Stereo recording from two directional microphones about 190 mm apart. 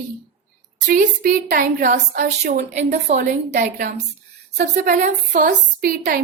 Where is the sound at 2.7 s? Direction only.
40° right (ahead or behind).